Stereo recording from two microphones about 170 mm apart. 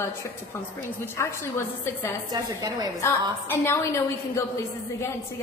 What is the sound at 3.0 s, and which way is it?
A woman's voice, 15° left (ahead or behind).